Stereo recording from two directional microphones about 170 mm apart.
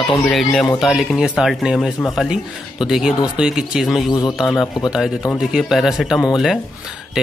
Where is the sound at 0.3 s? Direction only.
Centre (ahead or behind).